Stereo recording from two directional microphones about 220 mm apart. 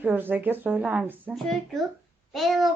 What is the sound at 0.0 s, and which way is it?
A woman's voice, 10° right (ahead or behind).